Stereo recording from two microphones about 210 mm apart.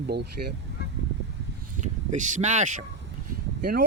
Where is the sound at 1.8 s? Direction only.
35° right (ahead or behind).